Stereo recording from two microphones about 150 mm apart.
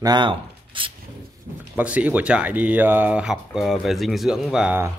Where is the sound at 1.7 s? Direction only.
10° right (ahead or behind).